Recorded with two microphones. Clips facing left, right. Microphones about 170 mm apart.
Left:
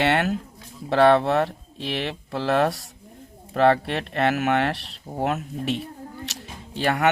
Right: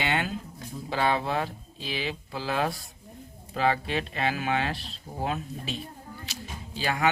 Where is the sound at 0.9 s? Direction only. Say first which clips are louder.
Left 10 dB; 70° left (ahead or behind).